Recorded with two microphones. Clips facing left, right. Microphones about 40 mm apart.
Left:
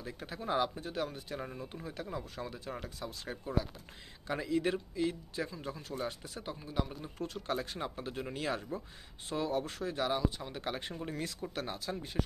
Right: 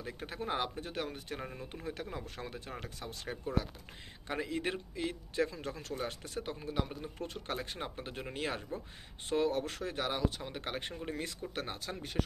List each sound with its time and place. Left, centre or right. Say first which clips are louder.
0.0 s speech: right 1 dB; right
1.4 s speech: left 1 dB; centre
1.8 s speech: right 1 dB; right
5.5 s speech: right 1 dB; right
5.9 s speech: left 1 dB; right
7.0 s speech: left 1 dB; right
11.1 s speech: left 1 dB; right
11.5 s speech: left 2 dB; right